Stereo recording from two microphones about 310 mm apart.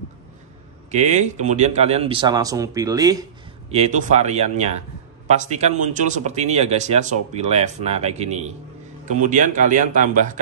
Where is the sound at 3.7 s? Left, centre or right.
Right.